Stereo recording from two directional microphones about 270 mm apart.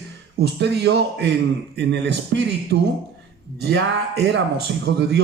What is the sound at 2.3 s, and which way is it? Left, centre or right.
Speech, right.